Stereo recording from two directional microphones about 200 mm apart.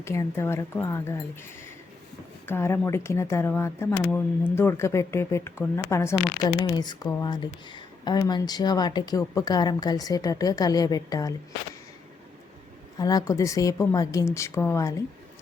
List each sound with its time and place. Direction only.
0.0 s speech: 15° left (ahead or behind)
2.5 s speech: 10° left (ahead or behind)
13.0 s speech: 20° left (ahead or behind)